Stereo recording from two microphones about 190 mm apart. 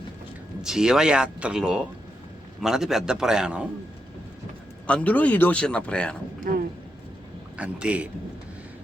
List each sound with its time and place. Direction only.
0.6 s speech: 5° right (ahead or behind)
4.9 s speech: 5° left (ahead or behind)
6.5 s speech: 50° right (ahead or behind)
7.5 s a man's voice: 5° right (ahead or behind)